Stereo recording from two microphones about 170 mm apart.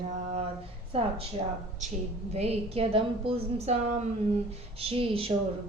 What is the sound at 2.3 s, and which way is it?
A woman's voice, 35° right (ahead or behind).